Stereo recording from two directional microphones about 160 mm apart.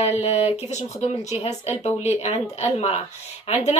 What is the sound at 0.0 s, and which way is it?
Speech, 40° left (ahead or behind).